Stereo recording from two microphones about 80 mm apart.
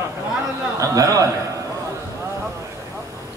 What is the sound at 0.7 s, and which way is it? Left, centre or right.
Speech, right.